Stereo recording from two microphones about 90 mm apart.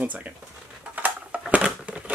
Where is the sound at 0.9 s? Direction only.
15° right (ahead or behind).